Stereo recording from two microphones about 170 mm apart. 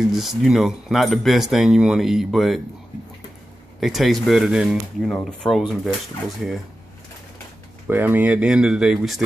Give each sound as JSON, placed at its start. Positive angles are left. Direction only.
{"t": 0.0, "sound": "speech", "side_deg": 0}
{"t": 3.8, "sound": "speech", "side_deg": 0}
{"t": 7.9, "sound": "speech", "side_deg": -10}